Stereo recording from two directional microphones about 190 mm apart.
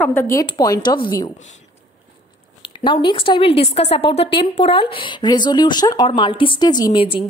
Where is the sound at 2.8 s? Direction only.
25° left (ahead or behind).